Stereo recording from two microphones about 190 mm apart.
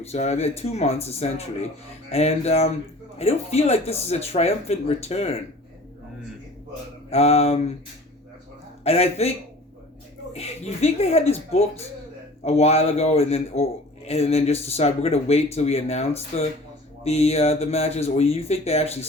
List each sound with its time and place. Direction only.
0.0 s a man's voice: 35° left (ahead or behind)
7.1 s a man's voice: 35° left (ahead or behind)
8.8 s a man's voice: 35° left (ahead or behind)
10.3 s a man's voice: 35° left (ahead or behind)